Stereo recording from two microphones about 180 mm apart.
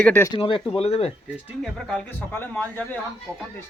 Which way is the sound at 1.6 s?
5° left (ahead or behind).